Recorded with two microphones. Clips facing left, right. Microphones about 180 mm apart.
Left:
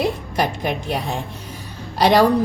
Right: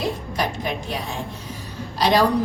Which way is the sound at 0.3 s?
60° left (ahead or behind).